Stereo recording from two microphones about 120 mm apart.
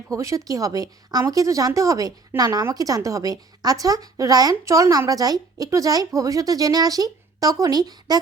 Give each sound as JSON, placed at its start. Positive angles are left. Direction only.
{"t": 0.1, "sound": "speech", "side_deg": -25}